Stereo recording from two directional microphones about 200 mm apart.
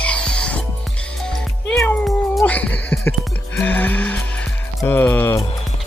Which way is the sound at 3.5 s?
10° left (ahead or behind).